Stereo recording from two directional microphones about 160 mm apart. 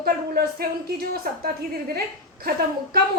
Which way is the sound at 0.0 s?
75° right (ahead or behind).